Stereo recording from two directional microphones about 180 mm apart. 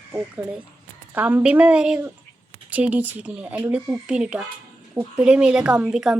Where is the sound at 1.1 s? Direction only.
10° right (ahead or behind).